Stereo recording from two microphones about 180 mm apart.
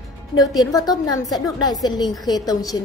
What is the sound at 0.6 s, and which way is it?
A woman's voice, 20° left (ahead or behind).